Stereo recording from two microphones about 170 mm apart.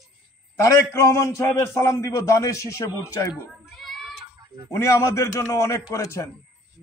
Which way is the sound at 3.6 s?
Centre (ahead or behind).